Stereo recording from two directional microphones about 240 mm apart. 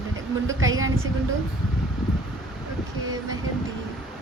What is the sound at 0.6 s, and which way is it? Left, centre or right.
Speech, right.